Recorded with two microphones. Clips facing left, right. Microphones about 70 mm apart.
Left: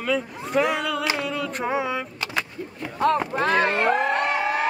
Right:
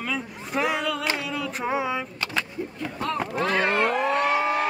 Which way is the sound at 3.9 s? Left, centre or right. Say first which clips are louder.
Left 2 dB; left.